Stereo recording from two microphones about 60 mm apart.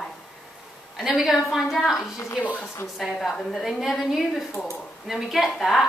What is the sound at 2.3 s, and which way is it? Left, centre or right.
Speech, centre.